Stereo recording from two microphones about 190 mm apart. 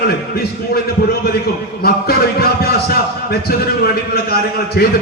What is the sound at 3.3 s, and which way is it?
A man's voice, 55° left (ahead or behind).